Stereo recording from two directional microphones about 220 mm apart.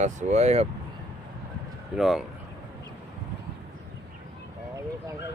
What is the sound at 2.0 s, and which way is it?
Speech, centre (ahead or behind).